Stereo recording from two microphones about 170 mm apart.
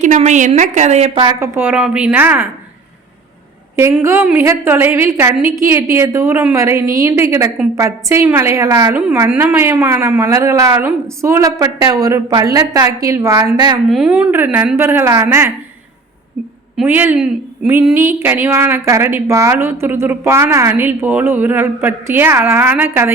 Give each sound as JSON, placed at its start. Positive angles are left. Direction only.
{"t": 0.0, "sound": "a woman's voice", "side_deg": -45}
{"t": 1.4, "sound": "a woman's voice", "side_deg": -10}
{"t": 3.8, "sound": "a woman's voice", "side_deg": -15}
{"t": 8.9, "sound": "a woman's voice", "side_deg": -10}
{"t": 13.9, "sound": "a woman's voice", "side_deg": -5}
{"t": 16.7, "sound": "a woman's voice", "side_deg": -10}